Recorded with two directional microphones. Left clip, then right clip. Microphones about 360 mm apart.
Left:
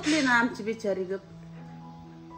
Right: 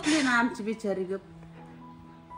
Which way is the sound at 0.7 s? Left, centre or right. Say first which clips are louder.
Left 2 dB; centre.